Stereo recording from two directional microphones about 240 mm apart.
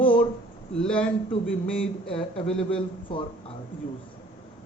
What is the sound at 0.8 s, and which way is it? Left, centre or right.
Speech, centre.